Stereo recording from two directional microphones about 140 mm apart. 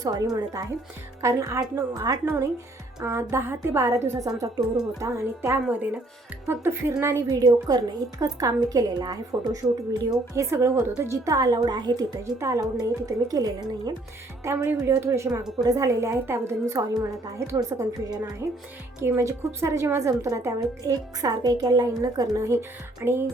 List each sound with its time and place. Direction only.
0.0 s a woman's voice: 25° right (ahead or behind)
14.4 s a woman's voice: 15° right (ahead or behind)